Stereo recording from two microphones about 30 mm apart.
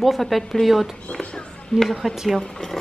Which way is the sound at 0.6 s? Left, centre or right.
Centre.